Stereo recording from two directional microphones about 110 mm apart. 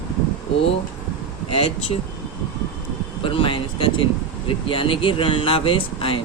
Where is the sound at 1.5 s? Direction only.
60° left (ahead or behind).